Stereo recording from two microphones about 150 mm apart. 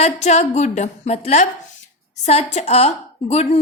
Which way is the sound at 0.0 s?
50° left (ahead or behind).